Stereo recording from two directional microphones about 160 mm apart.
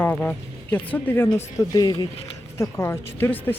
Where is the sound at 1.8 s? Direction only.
25° left (ahead or behind).